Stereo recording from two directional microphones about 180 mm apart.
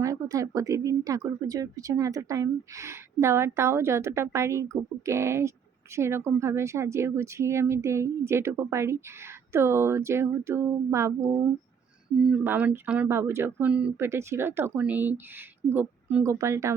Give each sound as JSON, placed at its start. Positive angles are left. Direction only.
{"t": 0.0, "sound": "speech", "side_deg": -20}